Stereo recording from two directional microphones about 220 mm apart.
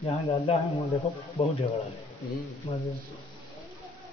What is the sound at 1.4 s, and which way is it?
Speech, 25° left (ahead or behind).